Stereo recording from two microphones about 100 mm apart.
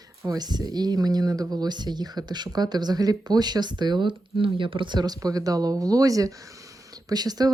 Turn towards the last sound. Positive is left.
turn(degrees=-40)  # may be behind; listen again after turning